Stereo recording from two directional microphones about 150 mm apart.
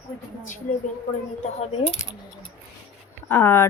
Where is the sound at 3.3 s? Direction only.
15° left (ahead or behind).